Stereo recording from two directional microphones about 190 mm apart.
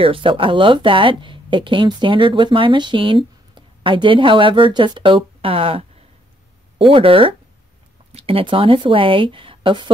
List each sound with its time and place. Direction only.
0.0 s speech: 30° right (ahead or behind)